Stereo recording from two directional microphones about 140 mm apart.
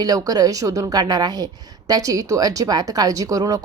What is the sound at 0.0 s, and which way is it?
A woman's voice, 25° right (ahead or behind).